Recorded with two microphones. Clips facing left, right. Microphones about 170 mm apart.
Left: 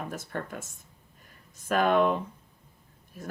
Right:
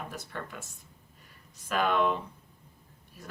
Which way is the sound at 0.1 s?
45° left (ahead or behind).